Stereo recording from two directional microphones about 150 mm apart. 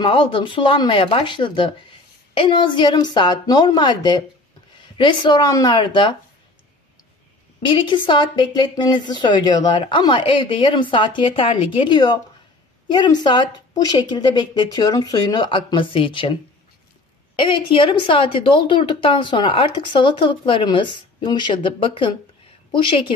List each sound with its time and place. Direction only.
0.0 s a woman's voice: 35° left (ahead or behind)
7.6 s a woman's voice: 35° left (ahead or behind)
17.4 s speech: 35° left (ahead or behind)